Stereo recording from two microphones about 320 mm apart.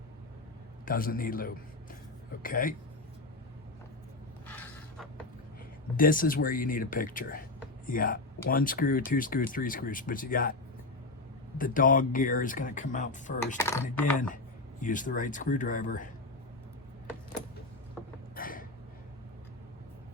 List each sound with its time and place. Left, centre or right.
0.9 s speech: left
4.4 s a sound: centre
6.0 s speech: left
11.5 s speech: left
13.6 s speech: centre
14.8 s speech: left
18.3 s a sound: left